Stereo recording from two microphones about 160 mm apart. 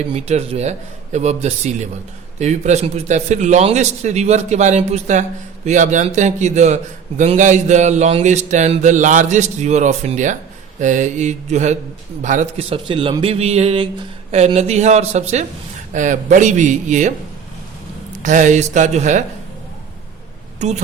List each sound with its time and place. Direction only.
0.1 s mantra: 40° right (ahead or behind)
12.2 s a man's voice: 50° right (ahead or behind)
15.9 s mantra: 50° right (ahead or behind)
18.2 s mantra: 50° right (ahead or behind)
20.6 s speech: 45° right (ahead or behind)